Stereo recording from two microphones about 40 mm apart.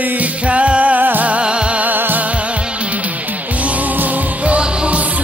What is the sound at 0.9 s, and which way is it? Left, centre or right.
Music, right.